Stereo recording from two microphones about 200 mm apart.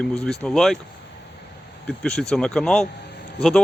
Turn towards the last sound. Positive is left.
turn(degrees=5)  # may be behind; listen again after turning